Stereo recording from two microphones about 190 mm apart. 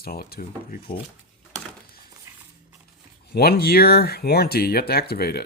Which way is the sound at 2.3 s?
10° right (ahead or behind).